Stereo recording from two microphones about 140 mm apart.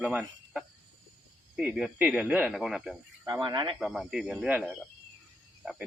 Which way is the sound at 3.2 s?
30° right (ahead or behind).